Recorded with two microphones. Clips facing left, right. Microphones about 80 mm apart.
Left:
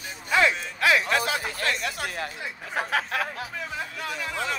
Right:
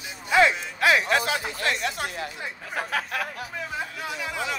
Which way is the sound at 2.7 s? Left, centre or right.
Left.